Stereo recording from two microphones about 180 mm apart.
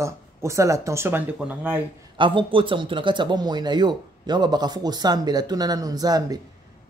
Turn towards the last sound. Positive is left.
turn(degrees=-20)  # may be behind; listen again after turning